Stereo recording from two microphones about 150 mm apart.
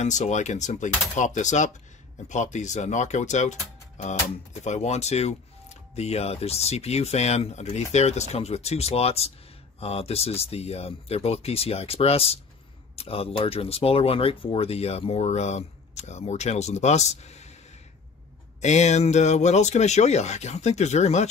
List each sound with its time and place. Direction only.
0.0 s speech: 50° left (ahead or behind)
18.6 s speech: 50° left (ahead or behind)